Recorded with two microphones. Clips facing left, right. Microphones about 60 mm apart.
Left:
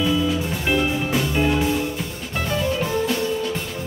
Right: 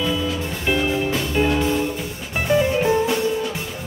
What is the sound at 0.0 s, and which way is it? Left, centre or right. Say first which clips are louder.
Music: left 2 dB; centre.